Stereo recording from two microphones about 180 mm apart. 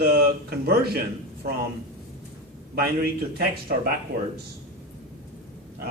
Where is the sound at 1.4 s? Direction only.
55° right (ahead or behind).